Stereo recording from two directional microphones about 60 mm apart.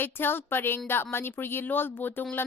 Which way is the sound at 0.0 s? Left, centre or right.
Left.